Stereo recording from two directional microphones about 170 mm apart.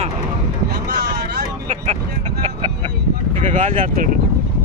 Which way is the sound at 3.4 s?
50° right (ahead or behind).